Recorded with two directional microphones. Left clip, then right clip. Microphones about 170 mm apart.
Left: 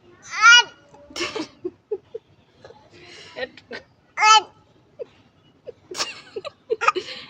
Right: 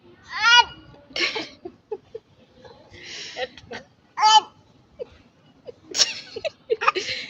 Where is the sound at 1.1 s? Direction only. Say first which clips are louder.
Right 3 dB; 15° left (ahead or behind).